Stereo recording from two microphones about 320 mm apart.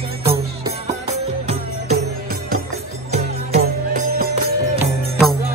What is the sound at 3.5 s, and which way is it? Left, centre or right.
Music, right.